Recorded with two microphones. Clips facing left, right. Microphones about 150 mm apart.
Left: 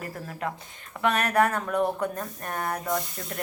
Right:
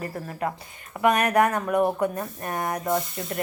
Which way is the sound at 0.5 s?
5° right (ahead or behind).